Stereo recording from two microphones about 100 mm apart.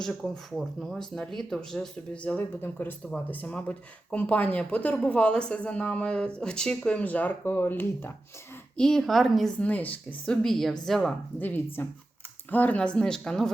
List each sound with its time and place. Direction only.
0.0 s speech: centre (ahead or behind)
2.6 s speech: 20° left (ahead or behind)
8.8 s speech: 5° left (ahead or behind)
9.6 s speech: 15° left (ahead or behind)
10.4 s speech: 5° left (ahead or behind)
11.3 s speech: 20° left (ahead or behind)